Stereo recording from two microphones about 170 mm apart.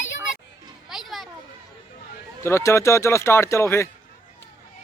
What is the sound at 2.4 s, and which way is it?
A man's voice, 15° left (ahead or behind).